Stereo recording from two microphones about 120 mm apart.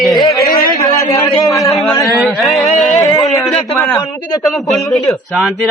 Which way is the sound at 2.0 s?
Centre (ahead or behind).